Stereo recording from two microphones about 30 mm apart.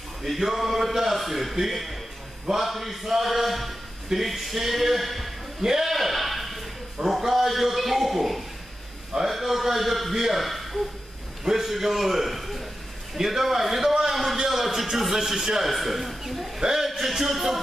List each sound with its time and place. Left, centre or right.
0.4 s a man's voice: centre
5.6 s a man's voice: centre
5.9 s a sound: centre
7.1 s a man's voice: centre
14.3 s a sound: centre
14.6 s a man's voice: centre